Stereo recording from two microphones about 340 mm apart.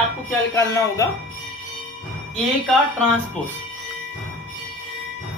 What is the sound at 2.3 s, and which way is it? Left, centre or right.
Speech, centre.